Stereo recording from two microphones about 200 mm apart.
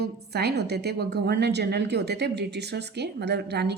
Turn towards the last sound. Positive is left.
turn(degrees=-55)  # may be behind; listen again after turning